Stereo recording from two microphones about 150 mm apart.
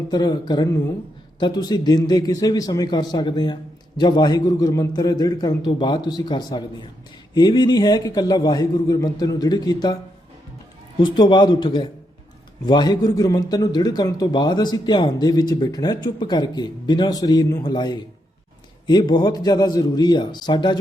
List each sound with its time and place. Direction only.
0.1 s a man's voice: 25° left (ahead or behind)